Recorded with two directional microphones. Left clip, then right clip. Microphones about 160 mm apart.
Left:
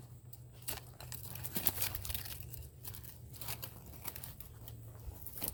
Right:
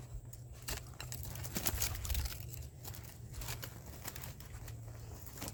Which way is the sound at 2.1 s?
30° right (ahead or behind).